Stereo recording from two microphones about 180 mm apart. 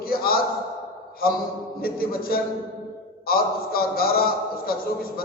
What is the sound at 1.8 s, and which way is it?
A man's voice, 55° left (ahead or behind).